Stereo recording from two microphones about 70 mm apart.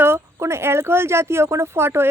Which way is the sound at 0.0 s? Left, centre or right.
Right.